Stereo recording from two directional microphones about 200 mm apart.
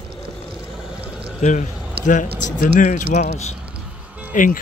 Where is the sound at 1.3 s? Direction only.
35° left (ahead or behind).